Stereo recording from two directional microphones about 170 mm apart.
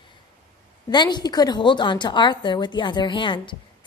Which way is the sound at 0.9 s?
25° left (ahead or behind).